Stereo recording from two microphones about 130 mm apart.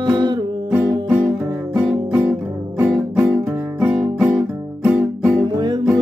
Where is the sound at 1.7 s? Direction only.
5° right (ahead or behind).